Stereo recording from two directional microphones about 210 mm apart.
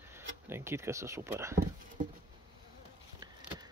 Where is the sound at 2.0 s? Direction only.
35° right (ahead or behind).